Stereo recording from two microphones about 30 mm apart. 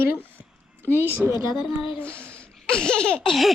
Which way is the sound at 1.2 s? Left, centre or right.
Right.